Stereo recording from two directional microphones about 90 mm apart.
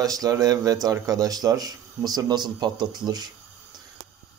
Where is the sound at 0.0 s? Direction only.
40° right (ahead or behind).